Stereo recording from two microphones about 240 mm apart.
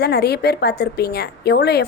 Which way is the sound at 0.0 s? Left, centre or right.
Left.